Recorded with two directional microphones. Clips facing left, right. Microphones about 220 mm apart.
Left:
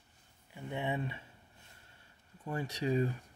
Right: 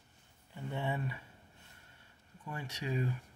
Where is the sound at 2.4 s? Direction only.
35° left (ahead or behind).